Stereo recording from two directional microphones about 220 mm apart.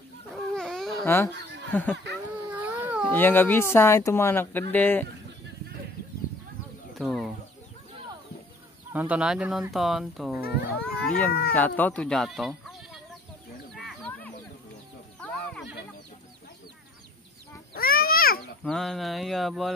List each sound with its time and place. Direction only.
0.3 s a sound: centre (ahead or behind)
1.1 s speech: 10° left (ahead or behind)
2.5 s baby cry: 5° right (ahead or behind)
3.1 s speech: 10° left (ahead or behind)
7.0 s speech: centre (ahead or behind)
8.9 s speech: 5° right (ahead or behind)
13.7 s a sound: centre (ahead or behind)
15.1 s sheep: 5° left (ahead or behind)
17.7 s a sound: 40° left (ahead or behind)
18.6 s speech: centre (ahead or behind)